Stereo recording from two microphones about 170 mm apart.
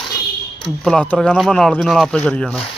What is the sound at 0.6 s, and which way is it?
Speech, 5° left (ahead or behind).